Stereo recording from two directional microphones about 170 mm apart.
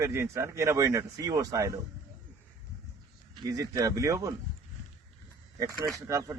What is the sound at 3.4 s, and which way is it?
Speech, 20° right (ahead or behind).